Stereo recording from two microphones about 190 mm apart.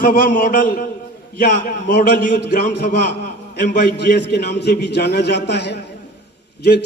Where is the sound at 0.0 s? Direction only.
50° left (ahead or behind).